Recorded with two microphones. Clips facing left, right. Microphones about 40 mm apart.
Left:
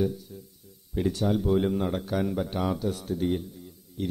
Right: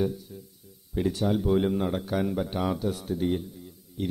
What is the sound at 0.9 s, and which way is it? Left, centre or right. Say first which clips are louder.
Speech: even; centre.